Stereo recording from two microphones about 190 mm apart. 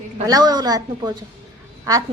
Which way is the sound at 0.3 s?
20° right (ahead or behind).